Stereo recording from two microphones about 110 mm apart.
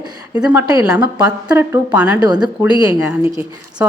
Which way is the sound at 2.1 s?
40° right (ahead or behind).